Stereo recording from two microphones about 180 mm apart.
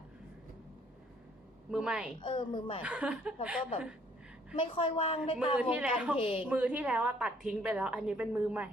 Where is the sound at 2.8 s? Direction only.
5° right (ahead or behind).